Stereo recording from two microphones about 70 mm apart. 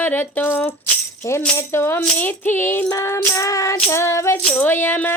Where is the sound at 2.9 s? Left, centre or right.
Left.